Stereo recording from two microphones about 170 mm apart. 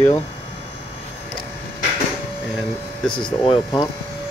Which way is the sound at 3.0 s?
5° left (ahead or behind).